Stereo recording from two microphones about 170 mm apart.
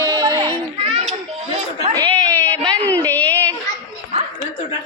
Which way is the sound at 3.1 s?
10° left (ahead or behind).